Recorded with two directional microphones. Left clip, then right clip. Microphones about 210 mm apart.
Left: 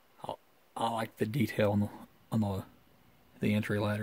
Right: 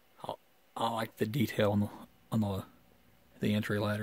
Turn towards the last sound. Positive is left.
turn(degrees=-10)  # may be behind; listen again after turning